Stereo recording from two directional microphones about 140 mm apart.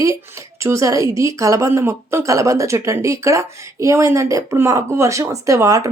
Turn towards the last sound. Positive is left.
turn(degrees=-25)  # may be behind; listen again after turning